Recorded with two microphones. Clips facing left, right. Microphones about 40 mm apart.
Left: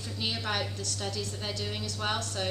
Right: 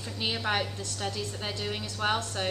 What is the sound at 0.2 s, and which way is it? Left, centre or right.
A woman's voice, centre.